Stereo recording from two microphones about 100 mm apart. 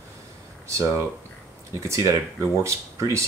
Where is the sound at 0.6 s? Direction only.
30° right (ahead or behind).